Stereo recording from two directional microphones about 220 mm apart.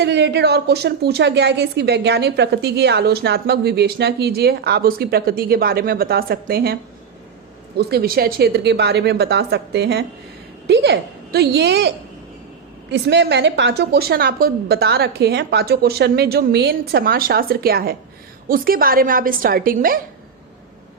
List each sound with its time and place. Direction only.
0.0 s a woman's voice: 50° right (ahead or behind)
7.8 s a woman's voice: 45° right (ahead or behind)